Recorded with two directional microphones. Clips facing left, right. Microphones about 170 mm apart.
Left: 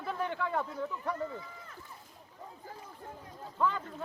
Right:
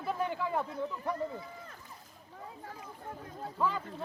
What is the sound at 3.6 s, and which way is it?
Speech, 5° right (ahead or behind).